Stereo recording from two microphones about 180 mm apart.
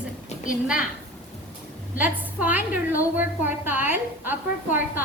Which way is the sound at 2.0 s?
10° right (ahead or behind).